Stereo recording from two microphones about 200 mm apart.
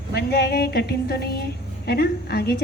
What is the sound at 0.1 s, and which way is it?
A woman's voice, 55° left (ahead or behind).